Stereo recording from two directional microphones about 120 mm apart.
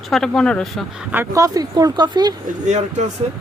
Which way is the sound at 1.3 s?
30° right (ahead or behind).